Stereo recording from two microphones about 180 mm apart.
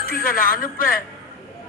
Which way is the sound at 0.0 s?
55° left (ahead or behind).